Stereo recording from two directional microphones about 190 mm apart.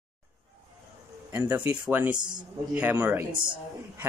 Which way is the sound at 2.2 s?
25° right (ahead or behind).